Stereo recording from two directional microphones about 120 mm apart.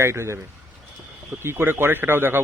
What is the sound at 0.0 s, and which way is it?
A man's voice, 20° right (ahead or behind).